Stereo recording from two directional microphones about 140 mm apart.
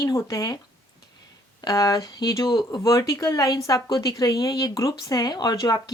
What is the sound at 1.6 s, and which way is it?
Speech, 25° left (ahead or behind).